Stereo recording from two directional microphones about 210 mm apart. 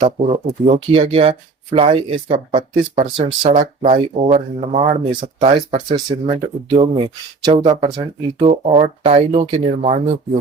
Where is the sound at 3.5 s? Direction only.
35° right (ahead or behind).